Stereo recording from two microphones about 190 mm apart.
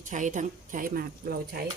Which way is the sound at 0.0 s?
40° right (ahead or behind).